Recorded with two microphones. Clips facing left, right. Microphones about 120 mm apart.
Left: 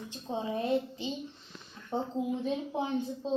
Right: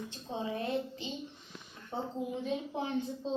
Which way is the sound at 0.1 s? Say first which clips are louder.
Left 5 dB; 15° left (ahead or behind).